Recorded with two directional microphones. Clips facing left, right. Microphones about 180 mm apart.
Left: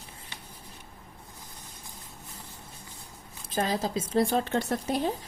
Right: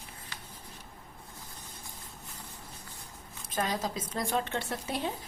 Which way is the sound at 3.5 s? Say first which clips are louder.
Left 4 dB; 30° left (ahead or behind).